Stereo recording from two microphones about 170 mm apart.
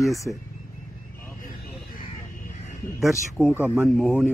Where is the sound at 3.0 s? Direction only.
Centre (ahead or behind).